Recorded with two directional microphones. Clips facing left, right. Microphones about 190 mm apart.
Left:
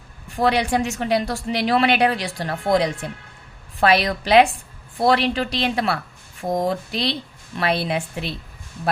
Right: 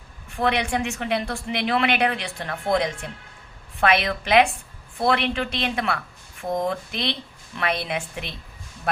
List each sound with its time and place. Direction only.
0.3 s speech: 35° left (ahead or behind)